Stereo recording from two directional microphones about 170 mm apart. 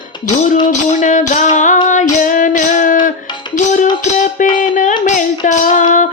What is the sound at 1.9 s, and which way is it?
Female singing, 45° left (ahead or behind).